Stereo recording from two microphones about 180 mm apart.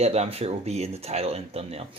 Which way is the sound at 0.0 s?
35° right (ahead or behind).